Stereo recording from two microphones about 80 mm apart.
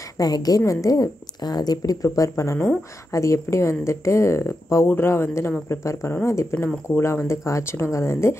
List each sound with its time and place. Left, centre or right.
0.2 s a woman's voice: left